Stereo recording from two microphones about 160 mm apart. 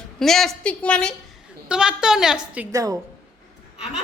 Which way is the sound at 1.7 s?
5° right (ahead or behind).